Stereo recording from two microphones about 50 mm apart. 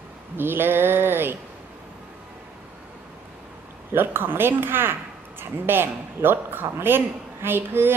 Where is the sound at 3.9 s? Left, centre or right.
Right.